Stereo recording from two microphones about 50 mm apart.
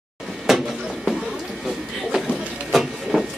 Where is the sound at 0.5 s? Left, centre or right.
Centre.